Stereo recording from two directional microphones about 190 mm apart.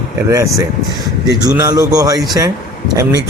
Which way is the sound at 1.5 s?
15° right (ahead or behind).